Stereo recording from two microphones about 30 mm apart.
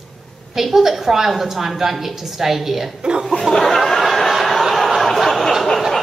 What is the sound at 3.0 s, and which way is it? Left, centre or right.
Speech, right.